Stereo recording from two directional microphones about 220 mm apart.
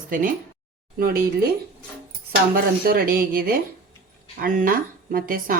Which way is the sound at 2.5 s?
40° right (ahead or behind).